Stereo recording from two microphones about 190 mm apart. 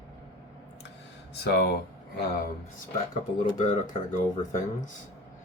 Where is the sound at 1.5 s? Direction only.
60° left (ahead or behind).